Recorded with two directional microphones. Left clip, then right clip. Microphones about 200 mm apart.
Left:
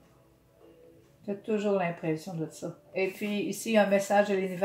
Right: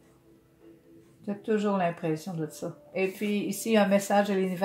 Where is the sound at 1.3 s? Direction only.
40° right (ahead or behind).